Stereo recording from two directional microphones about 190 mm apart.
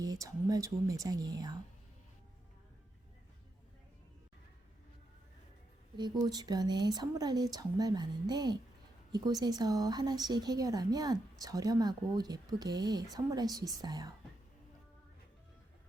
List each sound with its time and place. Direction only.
0.0 s speech: 20° right (ahead or behind)
6.0 s speech: 20° right (ahead or behind)